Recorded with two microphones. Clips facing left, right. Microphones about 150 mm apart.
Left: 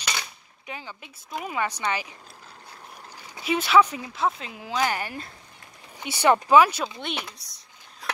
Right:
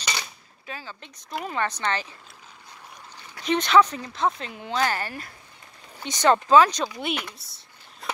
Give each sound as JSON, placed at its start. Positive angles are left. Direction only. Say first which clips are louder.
{"t": 0.0, "sound": "a sound", "louder": "even", "side_deg": 0}
{"t": 0.7, "sound": "speech", "louder": "even", "side_deg": 15}
{"t": 3.2, "sound": "speech", "louder": "right 2 dB", "side_deg": 10}